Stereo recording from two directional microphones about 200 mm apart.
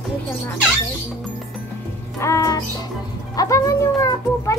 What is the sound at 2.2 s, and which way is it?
Speech, 15° left (ahead or behind).